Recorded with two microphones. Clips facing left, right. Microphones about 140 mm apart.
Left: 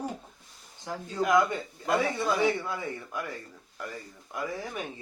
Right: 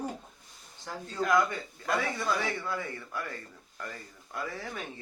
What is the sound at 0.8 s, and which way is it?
A man's voice, 15° left (ahead or behind).